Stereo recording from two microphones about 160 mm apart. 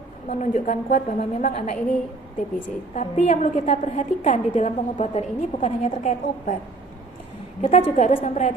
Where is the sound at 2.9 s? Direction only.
50° left (ahead or behind).